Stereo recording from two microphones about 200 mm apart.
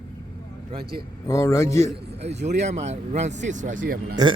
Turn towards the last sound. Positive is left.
turn(degrees=-20)  # may be behind; listen again after turning